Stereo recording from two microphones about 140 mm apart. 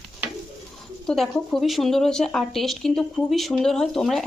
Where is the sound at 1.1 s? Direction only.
5° left (ahead or behind).